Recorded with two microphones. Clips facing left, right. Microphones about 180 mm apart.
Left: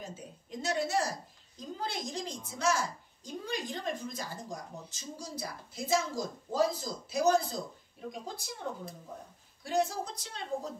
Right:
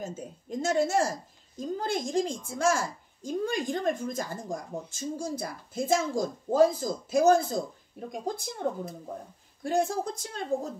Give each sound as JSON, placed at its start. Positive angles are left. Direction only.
{"t": 0.0, "sound": "a sound", "side_deg": -45}
{"t": 1.6, "sound": "speech", "side_deg": -50}
{"t": 9.6, "sound": "speech", "side_deg": -50}